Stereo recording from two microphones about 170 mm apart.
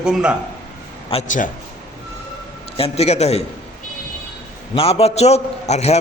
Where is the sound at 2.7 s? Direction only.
35° left (ahead or behind).